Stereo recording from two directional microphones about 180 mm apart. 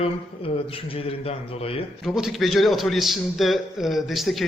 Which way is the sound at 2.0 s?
Centre (ahead or behind).